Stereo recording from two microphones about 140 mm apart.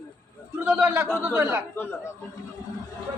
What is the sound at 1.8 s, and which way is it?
Speech, 15° left (ahead or behind).